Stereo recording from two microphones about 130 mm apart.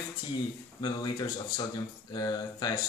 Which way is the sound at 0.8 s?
35° left (ahead or behind).